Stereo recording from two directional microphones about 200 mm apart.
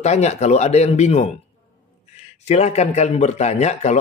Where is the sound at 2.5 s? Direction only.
35° left (ahead or behind).